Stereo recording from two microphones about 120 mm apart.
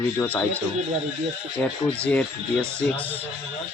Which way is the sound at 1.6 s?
10° left (ahead or behind).